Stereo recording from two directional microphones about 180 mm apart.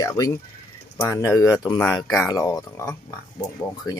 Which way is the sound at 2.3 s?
15° left (ahead or behind).